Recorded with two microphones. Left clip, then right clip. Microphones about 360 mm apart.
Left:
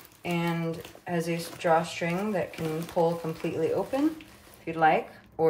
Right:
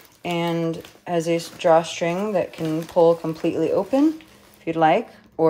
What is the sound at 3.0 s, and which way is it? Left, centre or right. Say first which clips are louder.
Speech: right 10 dB; right.